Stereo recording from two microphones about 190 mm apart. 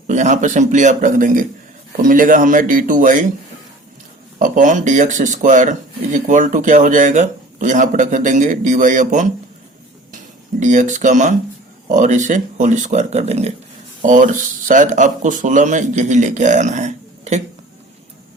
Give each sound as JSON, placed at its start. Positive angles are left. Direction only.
{"t": 0.1, "sound": "speech", "side_deg": -40}
{"t": 4.4, "sound": "speech", "side_deg": -45}
{"t": 10.6, "sound": "speech", "side_deg": -40}